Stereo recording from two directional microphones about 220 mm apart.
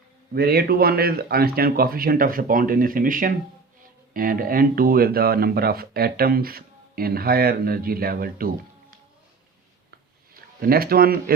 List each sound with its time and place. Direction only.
0.3 s a man's voice: 45° right (ahead or behind)
10.3 s speech: 40° right (ahead or behind)